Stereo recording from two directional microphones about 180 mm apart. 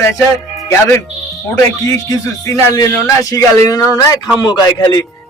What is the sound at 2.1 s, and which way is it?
A man's voice, 15° left (ahead or behind).